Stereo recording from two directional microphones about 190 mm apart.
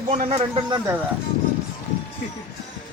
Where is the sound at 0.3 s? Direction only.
25° right (ahead or behind).